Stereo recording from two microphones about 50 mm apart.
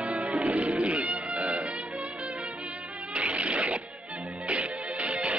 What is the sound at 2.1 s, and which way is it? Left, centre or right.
Music, right.